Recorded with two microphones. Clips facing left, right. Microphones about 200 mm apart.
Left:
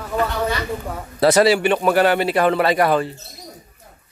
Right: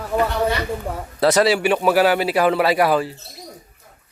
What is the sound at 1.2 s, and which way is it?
A man's voice, centre (ahead or behind).